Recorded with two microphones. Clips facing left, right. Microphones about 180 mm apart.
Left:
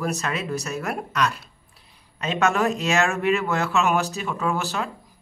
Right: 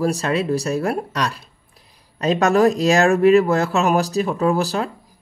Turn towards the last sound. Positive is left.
turn(degrees=-35)  # may be behind; listen again after turning